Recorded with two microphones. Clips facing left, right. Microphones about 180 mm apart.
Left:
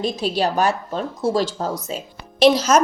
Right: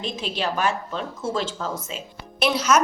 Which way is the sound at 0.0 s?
40° left (ahead or behind).